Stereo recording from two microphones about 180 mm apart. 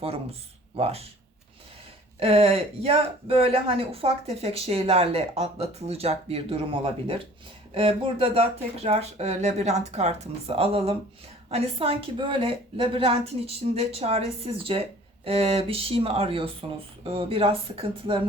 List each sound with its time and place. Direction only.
0.0 s a woman's voice: 35° right (ahead or behind)
2.1 s a woman's voice: 35° right (ahead or behind)